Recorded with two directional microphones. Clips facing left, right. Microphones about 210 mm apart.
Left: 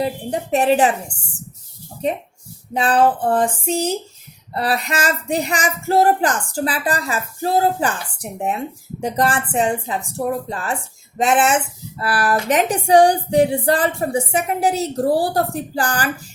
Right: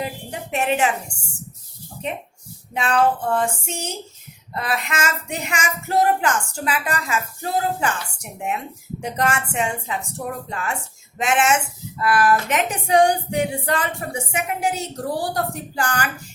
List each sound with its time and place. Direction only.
0.0 s speech: 35° left (ahead or behind)
2.7 s speech: 35° left (ahead or behind)